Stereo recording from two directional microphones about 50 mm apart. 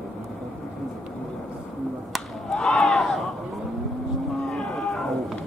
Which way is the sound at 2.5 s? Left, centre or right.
Centre.